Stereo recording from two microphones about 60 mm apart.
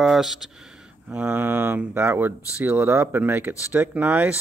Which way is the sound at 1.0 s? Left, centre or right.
Right.